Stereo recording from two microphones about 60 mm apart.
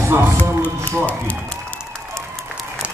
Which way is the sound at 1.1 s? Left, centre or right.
Left.